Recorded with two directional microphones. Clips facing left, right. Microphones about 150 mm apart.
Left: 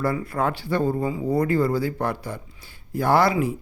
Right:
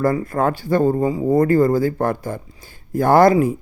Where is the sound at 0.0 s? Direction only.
45° right (ahead or behind).